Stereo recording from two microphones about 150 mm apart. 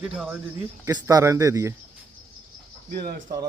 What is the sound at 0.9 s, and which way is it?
Speech, 20° right (ahead or behind).